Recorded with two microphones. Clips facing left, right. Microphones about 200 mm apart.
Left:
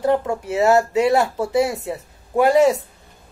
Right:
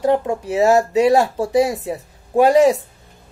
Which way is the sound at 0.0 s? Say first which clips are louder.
Right 2 dB; 20° right (ahead or behind).